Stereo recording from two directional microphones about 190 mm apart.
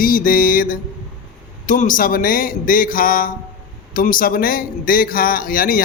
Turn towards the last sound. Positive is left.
turn(degrees=45)  # may be behind; listen again after turning